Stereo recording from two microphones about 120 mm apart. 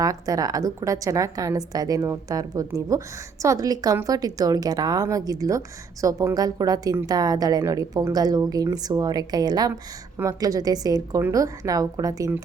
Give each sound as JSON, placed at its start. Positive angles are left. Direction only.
{"t": 0.0, "sound": "a woman's voice", "side_deg": -30}